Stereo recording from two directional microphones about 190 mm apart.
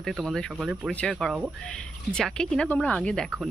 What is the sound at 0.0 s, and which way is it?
A woman's voice, centre (ahead or behind).